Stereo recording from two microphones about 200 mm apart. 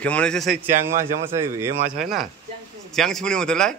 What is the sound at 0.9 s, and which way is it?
Speech, 15° right (ahead or behind).